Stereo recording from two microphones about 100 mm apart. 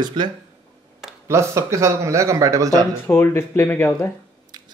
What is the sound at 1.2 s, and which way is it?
Speech, 30° right (ahead or behind).